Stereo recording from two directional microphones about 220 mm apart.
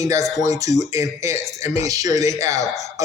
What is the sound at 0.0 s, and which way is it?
Speech, 15° right (ahead or behind).